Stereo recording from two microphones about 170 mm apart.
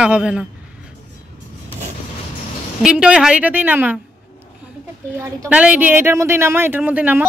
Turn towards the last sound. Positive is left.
turn(degrees=-10)  # may be behind; listen again after turning